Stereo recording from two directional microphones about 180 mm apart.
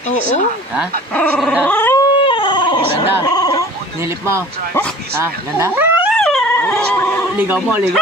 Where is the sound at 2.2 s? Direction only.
25° left (ahead or behind).